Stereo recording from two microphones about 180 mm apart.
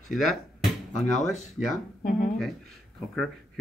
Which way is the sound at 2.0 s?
50° left (ahead or behind).